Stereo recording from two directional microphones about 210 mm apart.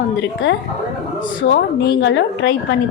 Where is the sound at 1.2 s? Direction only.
60° left (ahead or behind).